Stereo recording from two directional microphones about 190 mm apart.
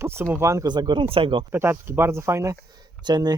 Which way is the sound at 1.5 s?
10° right (ahead or behind).